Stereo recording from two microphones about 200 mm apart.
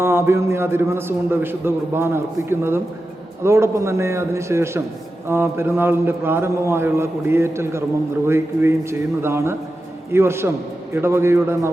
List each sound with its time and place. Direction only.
0.0 s a man's voice: 15° right (ahead or behind)